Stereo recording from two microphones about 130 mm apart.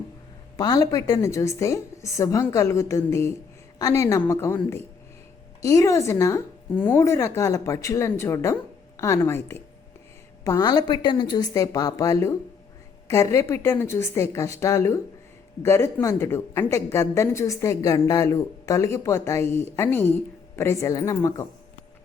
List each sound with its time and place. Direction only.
0.5 s a woman's voice: 30° left (ahead or behind)
10.7 s speech: 35° left (ahead or behind)